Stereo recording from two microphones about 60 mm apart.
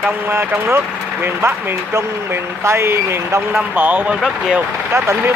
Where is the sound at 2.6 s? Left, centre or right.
Right.